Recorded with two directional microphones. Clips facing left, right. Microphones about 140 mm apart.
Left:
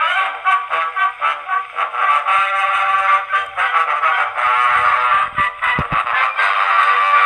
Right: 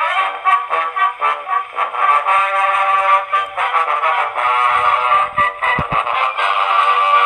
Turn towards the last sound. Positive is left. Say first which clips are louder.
# right 1 dB
turn(degrees=-20)  # may be behind; listen again after turning